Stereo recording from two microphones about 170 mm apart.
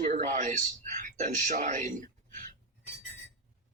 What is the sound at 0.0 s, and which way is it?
A man's voice, 50° right (ahead or behind).